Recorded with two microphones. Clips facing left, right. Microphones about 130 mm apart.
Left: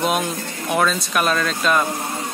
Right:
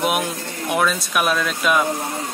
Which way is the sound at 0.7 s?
5° right (ahead or behind).